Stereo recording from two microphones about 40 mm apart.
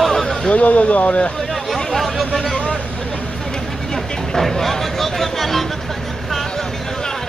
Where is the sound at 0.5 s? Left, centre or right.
Left.